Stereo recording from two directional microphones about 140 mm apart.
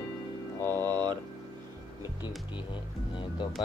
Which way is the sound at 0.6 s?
15° left (ahead or behind).